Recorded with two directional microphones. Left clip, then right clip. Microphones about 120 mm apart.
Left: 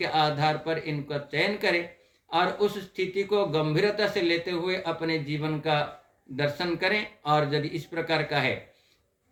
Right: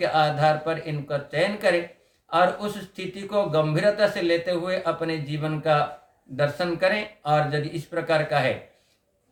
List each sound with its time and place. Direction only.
0.0 s speech: 30° right (ahead or behind)